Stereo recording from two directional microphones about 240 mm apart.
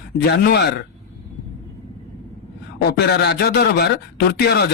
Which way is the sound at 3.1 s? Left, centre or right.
Left.